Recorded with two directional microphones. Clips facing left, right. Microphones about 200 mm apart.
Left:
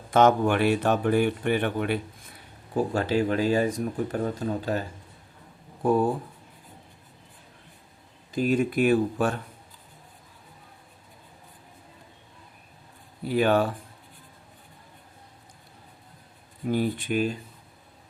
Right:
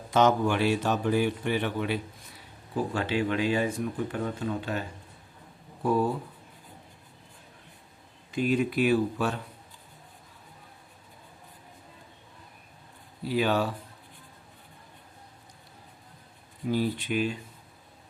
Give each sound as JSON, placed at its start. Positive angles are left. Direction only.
{"t": 0.1, "sound": "a man's voice", "side_deg": 55}
{"t": 2.7, "sound": "speech", "side_deg": 40}
{"t": 8.3, "sound": "speech", "side_deg": 40}
{"t": 13.2, "sound": "speech", "side_deg": 50}
{"t": 16.6, "sound": "speech", "side_deg": 50}